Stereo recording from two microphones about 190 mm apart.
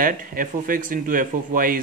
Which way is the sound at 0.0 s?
45° right (ahead or behind).